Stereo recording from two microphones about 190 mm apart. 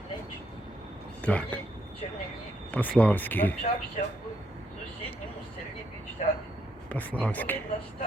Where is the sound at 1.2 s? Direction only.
5° left (ahead or behind).